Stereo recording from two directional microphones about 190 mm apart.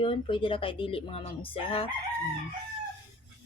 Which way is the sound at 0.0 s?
25° left (ahead or behind).